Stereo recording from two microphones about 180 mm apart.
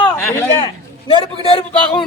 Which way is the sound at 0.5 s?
25° left (ahead or behind).